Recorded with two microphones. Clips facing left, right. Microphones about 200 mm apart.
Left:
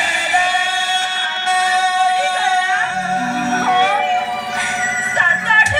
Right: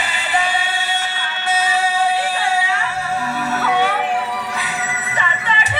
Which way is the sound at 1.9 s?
45° left (ahead or behind).